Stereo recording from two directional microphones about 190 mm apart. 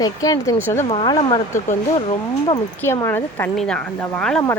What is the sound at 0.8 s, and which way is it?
Speech, 25° left (ahead or behind).